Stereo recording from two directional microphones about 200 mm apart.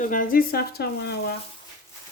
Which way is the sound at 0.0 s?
40° left (ahead or behind).